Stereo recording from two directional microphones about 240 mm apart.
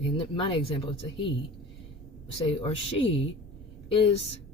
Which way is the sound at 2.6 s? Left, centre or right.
Left.